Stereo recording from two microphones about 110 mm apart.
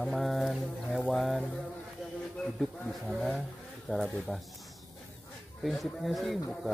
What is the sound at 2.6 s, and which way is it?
Speech, centre (ahead or behind).